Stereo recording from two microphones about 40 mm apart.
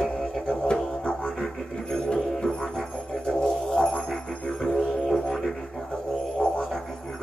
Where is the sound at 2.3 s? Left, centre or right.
Centre.